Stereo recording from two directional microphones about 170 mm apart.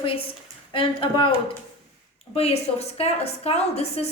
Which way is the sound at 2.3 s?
35° left (ahead or behind).